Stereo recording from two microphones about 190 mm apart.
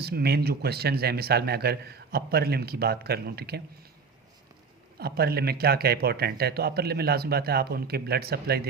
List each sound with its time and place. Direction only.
0.0 s speech: 55° right (ahead or behind)
4.9 s speech: 55° right (ahead or behind)